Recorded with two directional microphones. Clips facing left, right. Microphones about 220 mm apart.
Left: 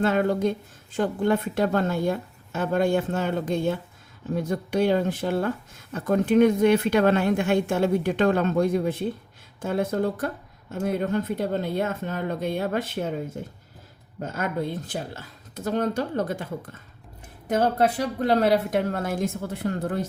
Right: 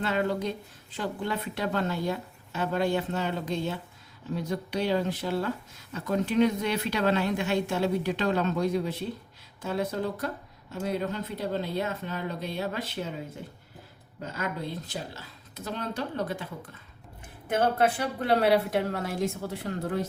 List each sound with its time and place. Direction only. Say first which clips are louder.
0.0 s speech: left 6 dB; 45° left (ahead or behind)
17.7 s speech: left 3 dB; 40° left (ahead or behind)